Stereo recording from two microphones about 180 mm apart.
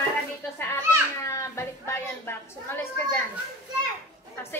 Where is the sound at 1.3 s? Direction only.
15° left (ahead or behind).